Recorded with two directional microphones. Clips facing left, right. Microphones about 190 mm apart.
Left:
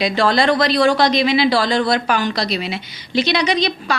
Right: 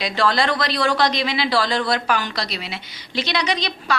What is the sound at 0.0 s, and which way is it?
A woman's voice, 15° left (ahead or behind).